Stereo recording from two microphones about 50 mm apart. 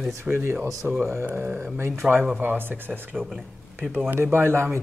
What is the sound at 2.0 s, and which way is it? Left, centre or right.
Speech, centre.